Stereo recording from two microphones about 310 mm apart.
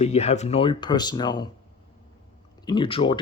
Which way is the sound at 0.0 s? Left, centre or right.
Left.